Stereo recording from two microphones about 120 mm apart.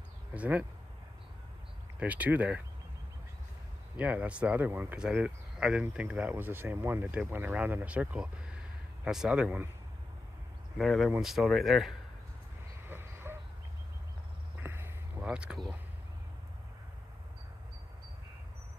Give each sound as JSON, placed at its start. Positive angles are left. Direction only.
{"t": 0.3, "sound": "speech", "side_deg": -10}
{"t": 2.0, "sound": "speech", "side_deg": -10}
{"t": 3.9, "sound": "speech", "side_deg": -10}
{"t": 10.8, "sound": "speech", "side_deg": 0}
{"t": 12.8, "sound": "a sound", "side_deg": -20}
{"t": 14.6, "sound": "a sound", "side_deg": -20}
{"t": 15.2, "sound": "speech", "side_deg": -10}